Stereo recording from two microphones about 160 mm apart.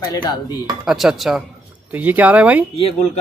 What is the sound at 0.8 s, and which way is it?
Speech, 5° right (ahead or behind).